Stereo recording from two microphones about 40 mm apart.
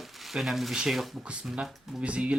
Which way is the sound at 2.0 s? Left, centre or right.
Right.